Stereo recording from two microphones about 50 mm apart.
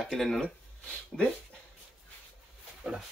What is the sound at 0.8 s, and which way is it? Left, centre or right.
Speech, left.